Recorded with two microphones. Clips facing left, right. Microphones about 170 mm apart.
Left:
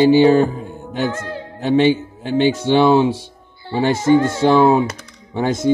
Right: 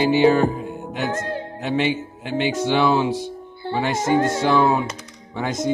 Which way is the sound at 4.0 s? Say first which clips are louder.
Left 5 dB; 45° right (ahead or behind).